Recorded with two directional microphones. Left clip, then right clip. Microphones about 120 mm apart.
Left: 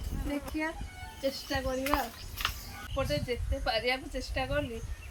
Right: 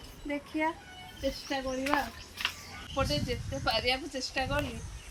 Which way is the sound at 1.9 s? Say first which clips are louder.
Right 2 dB; 40° right (ahead or behind).